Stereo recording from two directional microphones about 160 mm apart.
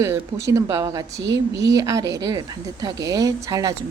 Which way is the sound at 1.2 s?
90° right.